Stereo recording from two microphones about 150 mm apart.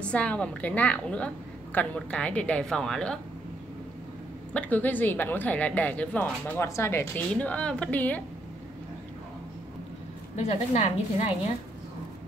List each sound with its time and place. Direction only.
0.0 s a woman's voice: 10° left (ahead or behind)
4.6 s a woman's voice: 10° left (ahead or behind)
10.7 s a woman's voice: 50° left (ahead or behind)